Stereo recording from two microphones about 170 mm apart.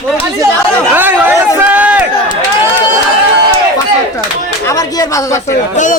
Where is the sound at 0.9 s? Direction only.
10° right (ahead or behind).